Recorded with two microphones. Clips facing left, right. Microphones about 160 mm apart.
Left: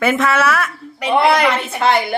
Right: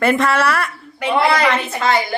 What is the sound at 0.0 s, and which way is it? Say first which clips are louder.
A woman's voice: even; centre (ahead or behind).